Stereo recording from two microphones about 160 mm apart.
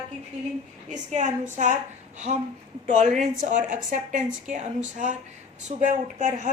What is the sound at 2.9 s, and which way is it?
A woman's voice, 50° right (ahead or behind).